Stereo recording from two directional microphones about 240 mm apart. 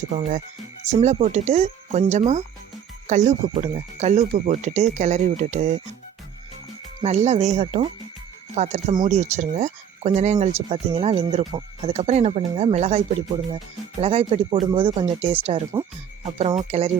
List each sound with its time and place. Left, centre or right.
0.1 s speech: right
7.0 s speech: right